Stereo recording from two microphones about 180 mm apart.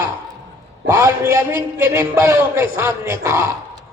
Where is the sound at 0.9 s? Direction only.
15° right (ahead or behind).